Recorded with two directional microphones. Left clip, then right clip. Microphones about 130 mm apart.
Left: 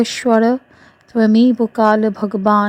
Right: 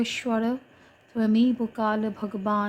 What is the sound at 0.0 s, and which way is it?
A woman's voice, 90° left.